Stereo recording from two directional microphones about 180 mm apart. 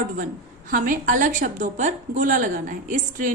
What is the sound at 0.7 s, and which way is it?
Speech, 45° right (ahead or behind).